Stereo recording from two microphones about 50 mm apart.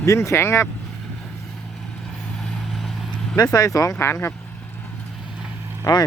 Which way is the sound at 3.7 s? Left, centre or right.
Left.